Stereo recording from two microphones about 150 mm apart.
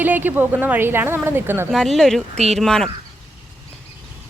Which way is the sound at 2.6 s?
5° left (ahead or behind).